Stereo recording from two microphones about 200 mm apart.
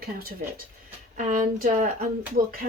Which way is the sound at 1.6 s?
45° right (ahead or behind).